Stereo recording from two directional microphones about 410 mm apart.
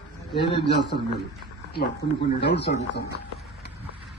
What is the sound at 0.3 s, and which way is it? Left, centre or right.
Speech, left.